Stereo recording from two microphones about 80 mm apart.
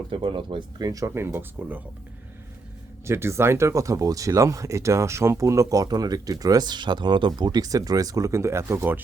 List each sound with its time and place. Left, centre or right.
0.1 s speech: right
0.8 s speech: right
1.1 s speech: right
3.1 s speech: right